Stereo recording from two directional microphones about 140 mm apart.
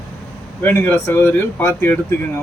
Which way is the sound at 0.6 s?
15° left (ahead or behind).